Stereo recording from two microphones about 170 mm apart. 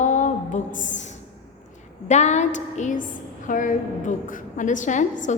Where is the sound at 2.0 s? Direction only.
45° left (ahead or behind).